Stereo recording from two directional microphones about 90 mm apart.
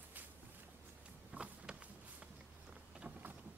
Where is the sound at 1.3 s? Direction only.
15° right (ahead or behind).